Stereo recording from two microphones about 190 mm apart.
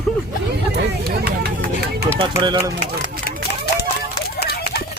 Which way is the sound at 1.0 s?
55° right (ahead or behind).